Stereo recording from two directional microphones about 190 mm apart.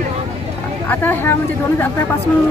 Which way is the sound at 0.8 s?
10° left (ahead or behind).